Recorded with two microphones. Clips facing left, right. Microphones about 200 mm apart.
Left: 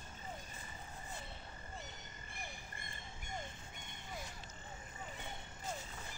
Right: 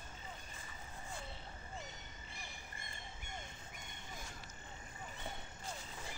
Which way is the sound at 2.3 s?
55° left (ahead or behind).